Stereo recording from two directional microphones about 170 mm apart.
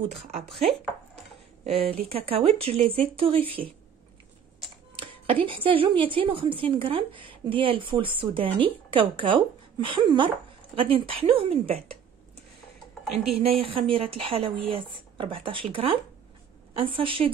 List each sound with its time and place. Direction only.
0.5 s speech: centre (ahead or behind)
1.6 s a woman's voice: 35° right (ahead or behind)
4.9 s a woman's voice: 30° right (ahead or behind)
13.4 s a woman's voice: 35° right (ahead or behind)